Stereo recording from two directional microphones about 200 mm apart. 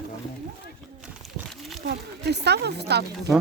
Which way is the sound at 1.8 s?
55° right (ahead or behind).